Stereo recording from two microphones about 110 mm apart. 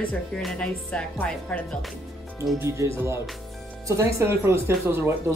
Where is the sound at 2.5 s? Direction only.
25° right (ahead or behind).